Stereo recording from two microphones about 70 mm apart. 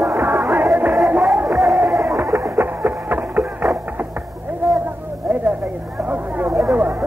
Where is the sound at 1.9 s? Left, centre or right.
Right.